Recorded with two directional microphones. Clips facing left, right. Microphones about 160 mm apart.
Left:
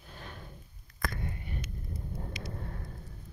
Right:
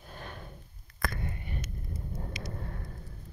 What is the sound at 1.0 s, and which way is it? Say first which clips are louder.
Whispering: right 1 dB; 65° right (ahead or behind).